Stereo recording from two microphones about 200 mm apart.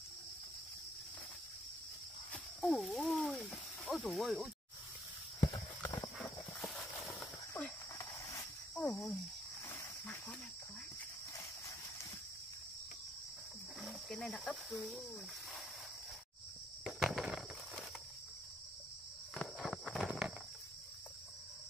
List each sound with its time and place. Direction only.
2.3 s a sound: centre (ahead or behind)
5.4 s clip-clop: 20° left (ahead or behind)
6.1 s horse: 5° left (ahead or behind)
8.7 s speech: 5° left (ahead or behind)
9.7 s cricket: 10° left (ahead or behind)
13.7 s speech: centre (ahead or behind)
16.8 s a sound: centre (ahead or behind)
19.3 s walk: centre (ahead or behind)